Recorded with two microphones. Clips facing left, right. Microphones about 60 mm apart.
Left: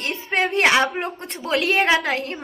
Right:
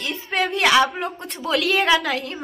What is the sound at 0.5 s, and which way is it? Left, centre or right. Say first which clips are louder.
Speech: right 1 dB; left.